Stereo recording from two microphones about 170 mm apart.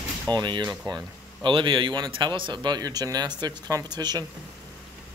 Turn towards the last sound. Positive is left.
turn(degrees=-25)  # may be behind; listen again after turning